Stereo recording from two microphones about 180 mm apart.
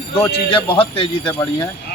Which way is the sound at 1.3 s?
15° left (ahead or behind).